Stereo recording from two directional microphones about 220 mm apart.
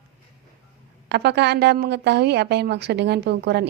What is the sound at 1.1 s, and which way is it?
A woman's voice, 50° right (ahead or behind).